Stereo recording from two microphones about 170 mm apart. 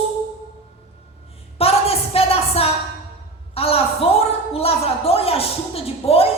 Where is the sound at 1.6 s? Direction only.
35° left (ahead or behind).